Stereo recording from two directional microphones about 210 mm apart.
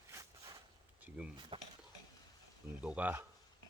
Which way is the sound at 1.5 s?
25° right (ahead or behind).